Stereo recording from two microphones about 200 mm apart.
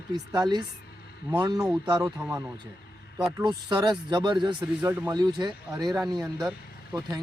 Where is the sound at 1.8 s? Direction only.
20° right (ahead or behind).